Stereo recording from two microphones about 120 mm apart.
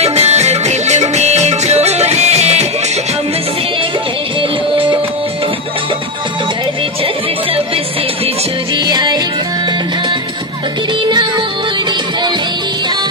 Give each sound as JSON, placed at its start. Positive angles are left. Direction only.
{"t": 0.0, "sound": "music", "side_deg": -60}
{"t": 4.4, "sound": "music", "side_deg": -45}
{"t": 8.7, "sound": "music", "side_deg": -35}
{"t": 11.0, "sound": "music", "side_deg": -40}